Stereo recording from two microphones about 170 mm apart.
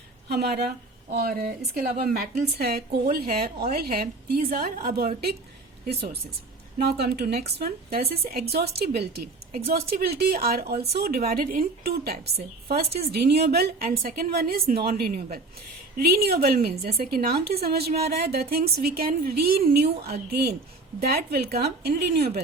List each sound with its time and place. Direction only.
0.3 s a woman's voice: 70° right (ahead or behind)